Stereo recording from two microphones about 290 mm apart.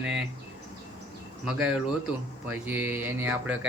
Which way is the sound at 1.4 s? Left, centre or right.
Centre.